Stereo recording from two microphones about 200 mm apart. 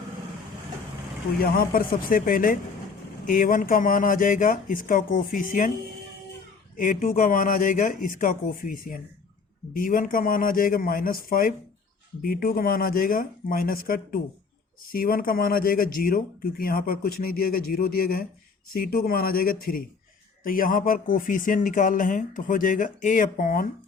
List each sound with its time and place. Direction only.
1.4 s speech: 45° left (ahead or behind)
6.7 s speech: 45° left (ahead or behind)